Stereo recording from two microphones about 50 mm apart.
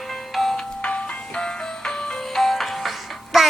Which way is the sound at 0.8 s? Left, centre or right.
Left.